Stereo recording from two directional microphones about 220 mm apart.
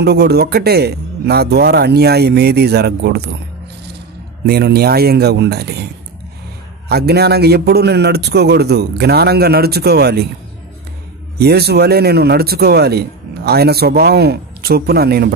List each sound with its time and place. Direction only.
0.0 s speech: 45° right (ahead or behind)
4.5 s speech: 45° right (ahead or behind)
6.9 s speech: 45° right (ahead or behind)
11.3 s speech: 45° right (ahead or behind)